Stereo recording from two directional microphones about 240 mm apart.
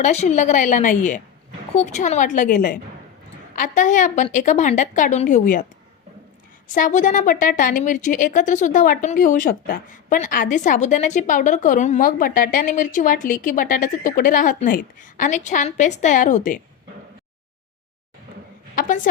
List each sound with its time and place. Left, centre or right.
0.0 s speech: left
6.7 s speech: left